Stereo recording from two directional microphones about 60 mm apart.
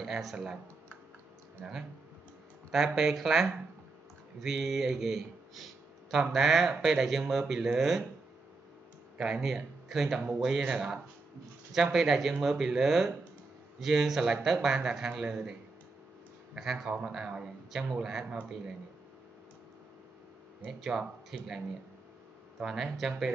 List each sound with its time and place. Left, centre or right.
0.0 s speech: centre
2.7 s speech: centre
9.4 s speech: centre
16.5 s speech: centre
20.8 s speech: centre